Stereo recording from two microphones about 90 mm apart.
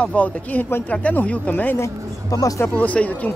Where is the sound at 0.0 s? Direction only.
15° left (ahead or behind).